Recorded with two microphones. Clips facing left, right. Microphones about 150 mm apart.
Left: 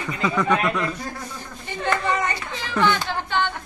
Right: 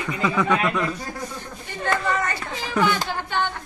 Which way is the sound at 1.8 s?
15° left (ahead or behind).